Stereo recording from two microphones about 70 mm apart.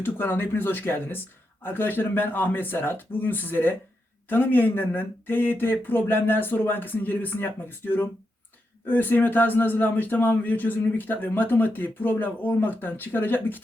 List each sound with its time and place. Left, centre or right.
0.0 s speech: left